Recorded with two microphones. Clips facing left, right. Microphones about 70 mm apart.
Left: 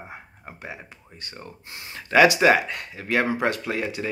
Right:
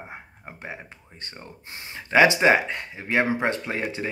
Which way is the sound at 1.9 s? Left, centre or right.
Right.